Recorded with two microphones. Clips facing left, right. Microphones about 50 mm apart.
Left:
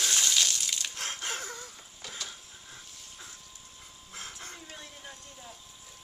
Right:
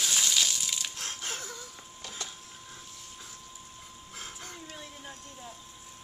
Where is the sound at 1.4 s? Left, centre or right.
Left.